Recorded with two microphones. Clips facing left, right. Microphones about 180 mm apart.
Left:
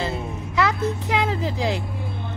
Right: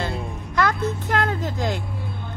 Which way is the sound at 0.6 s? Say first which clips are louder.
Even; centre (ahead or behind).